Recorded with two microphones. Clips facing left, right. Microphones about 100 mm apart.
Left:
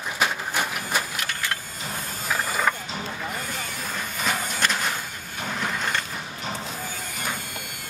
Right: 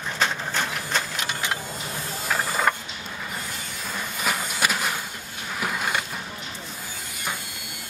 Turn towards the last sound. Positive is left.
turn(degrees=-10)  # may be behind; listen again after turning